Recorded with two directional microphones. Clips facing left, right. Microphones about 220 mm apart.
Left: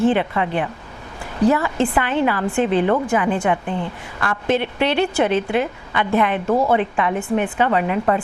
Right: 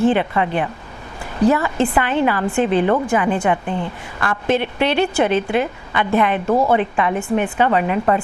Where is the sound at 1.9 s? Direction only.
20° right (ahead or behind).